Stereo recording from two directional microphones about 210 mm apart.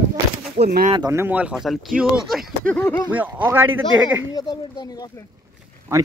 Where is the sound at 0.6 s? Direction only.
45° right (ahead or behind).